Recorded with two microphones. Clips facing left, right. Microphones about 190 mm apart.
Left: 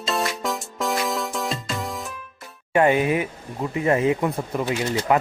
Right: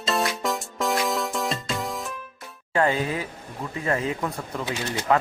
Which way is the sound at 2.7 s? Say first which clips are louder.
Left 5 dB; 20° left (ahead or behind).